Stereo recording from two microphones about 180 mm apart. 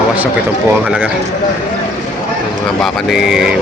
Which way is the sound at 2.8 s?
Centre (ahead or behind).